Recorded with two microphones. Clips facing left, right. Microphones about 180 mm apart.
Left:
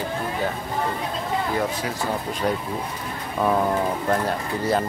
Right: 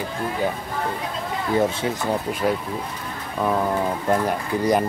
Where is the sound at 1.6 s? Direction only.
25° right (ahead or behind).